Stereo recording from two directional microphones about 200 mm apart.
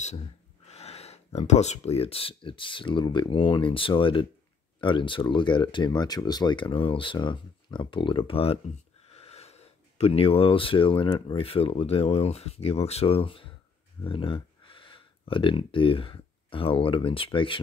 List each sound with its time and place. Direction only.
0.7 s speech: 30° left (ahead or behind)